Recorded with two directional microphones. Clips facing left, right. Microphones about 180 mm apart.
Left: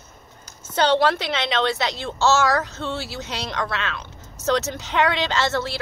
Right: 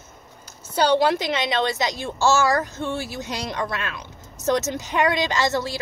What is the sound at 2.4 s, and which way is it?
Speech, 70° left (ahead or behind).